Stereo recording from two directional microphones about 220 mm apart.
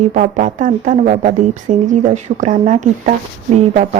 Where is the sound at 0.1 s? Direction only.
35° right (ahead or behind).